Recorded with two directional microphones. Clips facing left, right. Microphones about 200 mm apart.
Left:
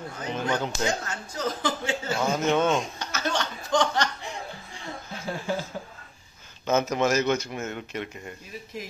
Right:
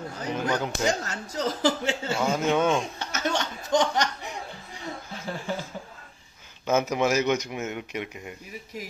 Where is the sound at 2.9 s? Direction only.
20° right (ahead or behind).